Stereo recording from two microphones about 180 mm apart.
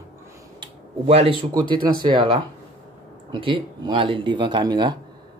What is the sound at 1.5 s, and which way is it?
Speech, 25° right (ahead or behind).